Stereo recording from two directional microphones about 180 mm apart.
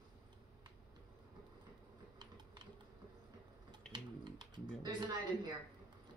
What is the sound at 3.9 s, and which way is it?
Typing, 25° right (ahead or behind).